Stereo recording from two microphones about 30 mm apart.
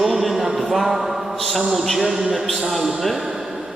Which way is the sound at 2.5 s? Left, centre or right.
Centre.